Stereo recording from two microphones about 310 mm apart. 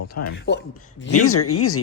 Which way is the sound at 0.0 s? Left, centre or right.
Left.